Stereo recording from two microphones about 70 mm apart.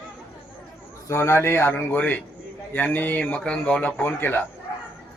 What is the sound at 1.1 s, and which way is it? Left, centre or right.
A man's voice, left.